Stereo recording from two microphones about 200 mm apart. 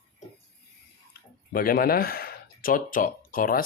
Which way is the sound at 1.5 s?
45° left (ahead or behind).